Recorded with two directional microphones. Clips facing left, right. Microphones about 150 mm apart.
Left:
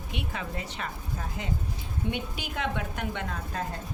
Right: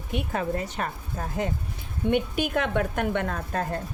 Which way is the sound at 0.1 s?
45° right (ahead or behind).